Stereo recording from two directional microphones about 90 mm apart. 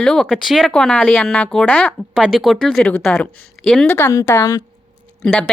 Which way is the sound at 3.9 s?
25° left (ahead or behind).